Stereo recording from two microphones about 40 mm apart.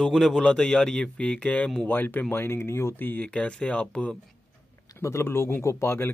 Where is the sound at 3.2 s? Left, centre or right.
Left.